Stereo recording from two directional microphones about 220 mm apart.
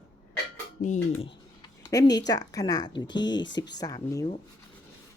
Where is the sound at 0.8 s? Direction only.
45° left (ahead or behind).